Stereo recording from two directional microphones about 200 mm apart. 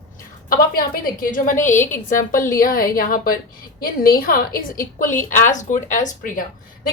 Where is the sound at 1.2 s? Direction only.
40° left (ahead or behind).